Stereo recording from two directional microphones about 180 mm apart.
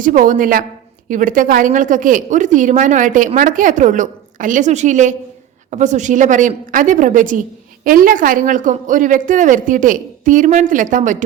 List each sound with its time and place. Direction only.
0.0 s a woman's voice: 50° right (ahead or behind)